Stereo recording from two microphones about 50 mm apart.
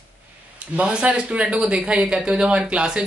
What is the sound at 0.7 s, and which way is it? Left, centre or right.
Speech, right.